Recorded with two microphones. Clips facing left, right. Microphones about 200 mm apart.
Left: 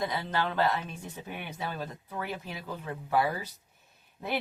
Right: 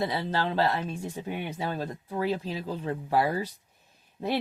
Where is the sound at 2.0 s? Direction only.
30° right (ahead or behind).